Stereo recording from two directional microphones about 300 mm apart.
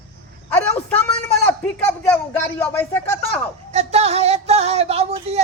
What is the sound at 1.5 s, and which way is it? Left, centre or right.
Speech, centre.